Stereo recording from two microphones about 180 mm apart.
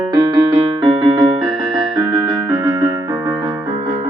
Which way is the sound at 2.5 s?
20° right (ahead or behind).